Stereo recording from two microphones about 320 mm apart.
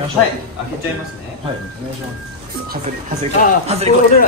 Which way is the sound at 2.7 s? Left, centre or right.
Right.